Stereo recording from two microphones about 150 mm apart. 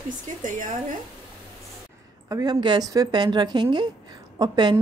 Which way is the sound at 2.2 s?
25° right (ahead or behind).